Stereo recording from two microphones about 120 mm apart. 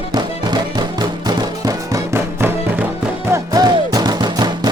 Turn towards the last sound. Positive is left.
turn(degrees=-35)  # may be behind; listen again after turning